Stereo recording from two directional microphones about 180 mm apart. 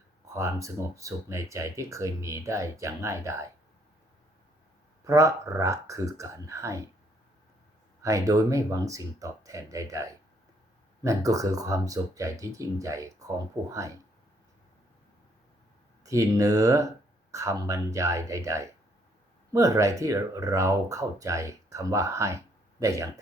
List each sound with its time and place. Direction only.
0.3 s speech: 15° right (ahead or behind)
5.0 s speech: 15° right (ahead or behind)
8.0 s speech: 20° right (ahead or behind)
16.0 s speech: 20° right (ahead or behind)